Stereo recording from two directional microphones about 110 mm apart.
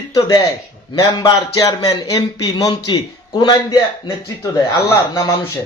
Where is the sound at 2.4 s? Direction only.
45° left (ahead or behind).